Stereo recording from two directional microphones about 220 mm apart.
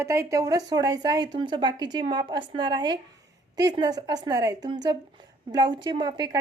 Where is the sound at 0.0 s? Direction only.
10° right (ahead or behind).